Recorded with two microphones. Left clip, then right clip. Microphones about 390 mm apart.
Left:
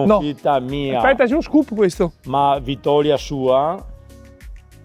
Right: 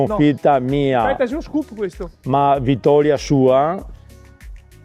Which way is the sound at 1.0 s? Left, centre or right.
Left.